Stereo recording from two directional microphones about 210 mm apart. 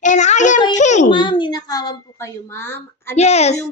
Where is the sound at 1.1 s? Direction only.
20° left (ahead or behind).